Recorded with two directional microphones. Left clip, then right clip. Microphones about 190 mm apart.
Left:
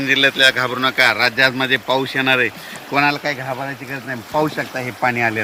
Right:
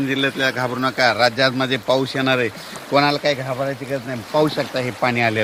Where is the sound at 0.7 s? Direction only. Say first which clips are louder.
Left 3 dB; 70° right (ahead or behind).